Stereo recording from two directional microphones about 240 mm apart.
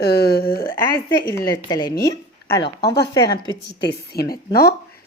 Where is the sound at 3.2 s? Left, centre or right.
Left.